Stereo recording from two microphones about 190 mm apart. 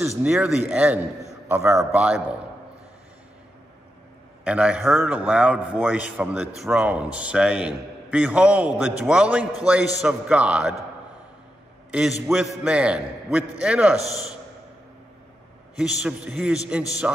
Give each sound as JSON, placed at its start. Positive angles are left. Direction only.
{"t": 0.2, "sound": "speech", "side_deg": -5}
{"t": 4.5, "sound": "a man's voice", "side_deg": -5}
{"t": 11.9, "sound": "a man's voice", "side_deg": -5}
{"t": 15.7, "sound": "a man's voice", "side_deg": -5}